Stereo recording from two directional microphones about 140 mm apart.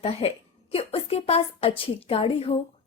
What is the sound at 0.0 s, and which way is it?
A woman's voice, 45° left (ahead or behind).